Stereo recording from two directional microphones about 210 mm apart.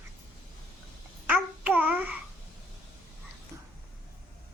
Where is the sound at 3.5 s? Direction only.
15° right (ahead or behind).